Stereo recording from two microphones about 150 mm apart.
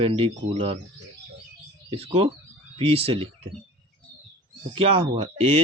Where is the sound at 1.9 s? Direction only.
40° right (ahead or behind).